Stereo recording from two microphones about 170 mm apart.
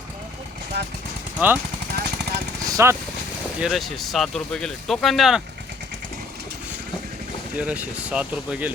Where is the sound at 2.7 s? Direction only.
15° right (ahead or behind).